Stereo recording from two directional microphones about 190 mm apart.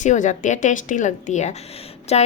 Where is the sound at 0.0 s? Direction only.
40° left (ahead or behind).